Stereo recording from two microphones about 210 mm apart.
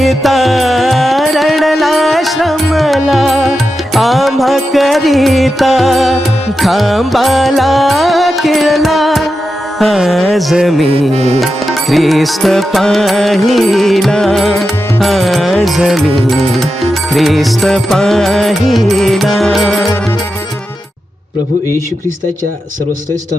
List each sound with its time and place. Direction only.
0.0 s music: centre (ahead or behind)
10.8 s music: 30° right (ahead or behind)
11.9 s music: centre (ahead or behind)